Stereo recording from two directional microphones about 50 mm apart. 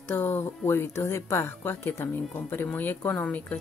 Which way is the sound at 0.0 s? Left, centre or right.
Left.